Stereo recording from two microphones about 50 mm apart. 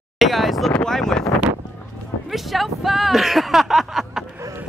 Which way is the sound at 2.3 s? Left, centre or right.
Centre.